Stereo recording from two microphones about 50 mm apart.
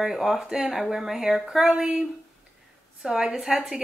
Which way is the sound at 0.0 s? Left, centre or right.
Centre.